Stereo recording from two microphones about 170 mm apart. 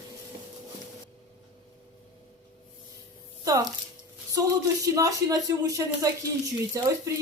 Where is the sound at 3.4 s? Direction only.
20° right (ahead or behind).